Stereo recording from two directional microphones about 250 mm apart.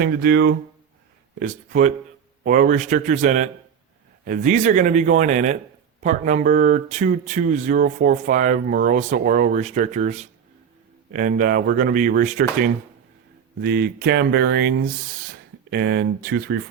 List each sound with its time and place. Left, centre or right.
0.0 s speech: right